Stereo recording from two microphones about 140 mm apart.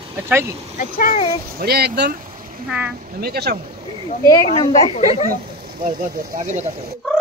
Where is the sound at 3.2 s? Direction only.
90° right.